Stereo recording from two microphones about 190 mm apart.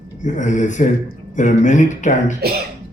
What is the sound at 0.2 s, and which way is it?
Speech, 40° left (ahead or behind).